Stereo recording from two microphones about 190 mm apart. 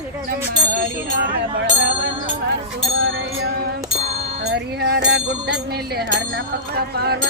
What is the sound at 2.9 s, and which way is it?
Music, 90° right.